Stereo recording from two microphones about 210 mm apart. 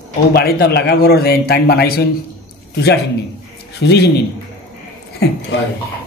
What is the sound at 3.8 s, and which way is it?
Speech, 55° left (ahead or behind).